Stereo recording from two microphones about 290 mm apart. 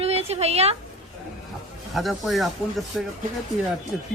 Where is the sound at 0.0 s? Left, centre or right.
Right.